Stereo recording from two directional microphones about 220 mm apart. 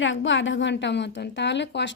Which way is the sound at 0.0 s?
60° left (ahead or behind).